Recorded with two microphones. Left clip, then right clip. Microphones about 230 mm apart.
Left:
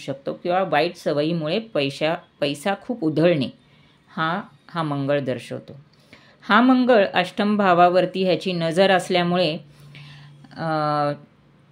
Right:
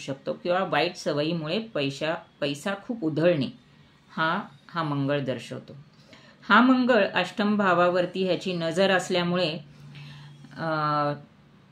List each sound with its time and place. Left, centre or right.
0.0 s speech: left